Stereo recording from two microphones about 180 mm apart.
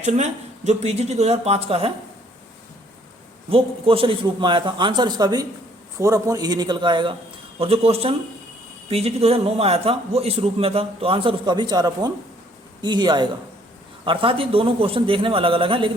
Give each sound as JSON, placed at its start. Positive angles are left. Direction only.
{"t": 0.0, "sound": "a man's voice", "side_deg": -40}
{"t": 3.5, "sound": "a man's voice", "side_deg": -30}